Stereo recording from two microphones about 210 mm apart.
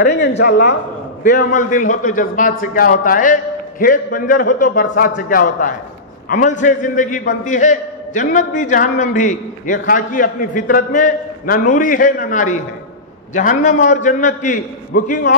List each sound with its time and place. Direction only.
0.1 s a man's voice: 55° left (ahead or behind)
1.2 s a man's voice: 35° left (ahead or behind)